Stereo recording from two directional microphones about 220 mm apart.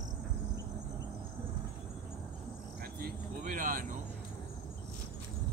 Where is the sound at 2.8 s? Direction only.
40° right (ahead or behind).